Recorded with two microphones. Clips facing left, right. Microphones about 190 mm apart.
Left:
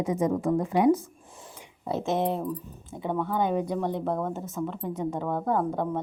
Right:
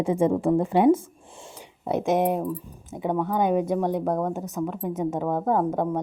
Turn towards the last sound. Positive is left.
turn(degrees=-15)  # may be behind; listen again after turning